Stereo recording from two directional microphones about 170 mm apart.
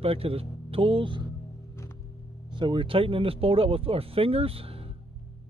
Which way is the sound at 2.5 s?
30° right (ahead or behind).